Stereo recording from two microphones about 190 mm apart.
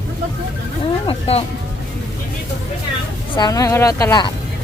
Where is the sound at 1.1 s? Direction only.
30° left (ahead or behind).